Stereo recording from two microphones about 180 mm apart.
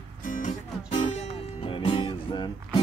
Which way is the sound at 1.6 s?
30° left (ahead or behind).